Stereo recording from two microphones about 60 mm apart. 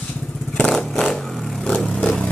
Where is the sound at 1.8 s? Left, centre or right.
Centre.